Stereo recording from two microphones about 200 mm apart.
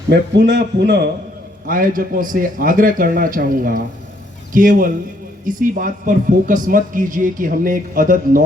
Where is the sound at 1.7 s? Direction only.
45° right (ahead or behind).